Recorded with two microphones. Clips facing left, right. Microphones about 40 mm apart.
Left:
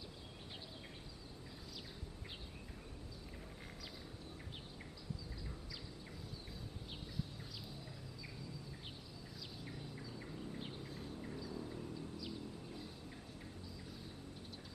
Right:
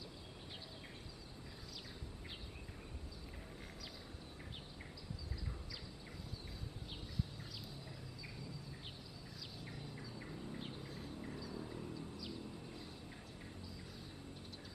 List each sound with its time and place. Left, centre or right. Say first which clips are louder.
9.7 s bird: left 1 dB; centre
11.6 s vehicle: even; centre
11.9 s a sound: left 1 dB; centre